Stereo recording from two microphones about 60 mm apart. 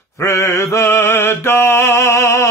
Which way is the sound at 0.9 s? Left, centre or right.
Left.